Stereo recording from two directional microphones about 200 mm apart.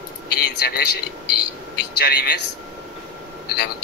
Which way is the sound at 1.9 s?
55° left (ahead or behind).